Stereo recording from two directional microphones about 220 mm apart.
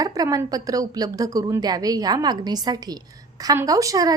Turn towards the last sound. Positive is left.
turn(degrees=-15)  # may be behind; listen again after turning